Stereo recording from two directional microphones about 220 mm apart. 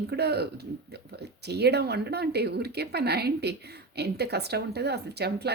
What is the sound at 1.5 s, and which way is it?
A woman's voice, 50° right (ahead or behind).